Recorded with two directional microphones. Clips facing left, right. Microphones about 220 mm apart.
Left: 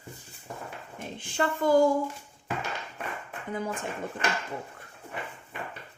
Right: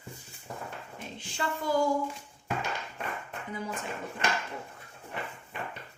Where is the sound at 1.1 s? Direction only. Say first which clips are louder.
Left 6 dB; 50° left (ahead or behind).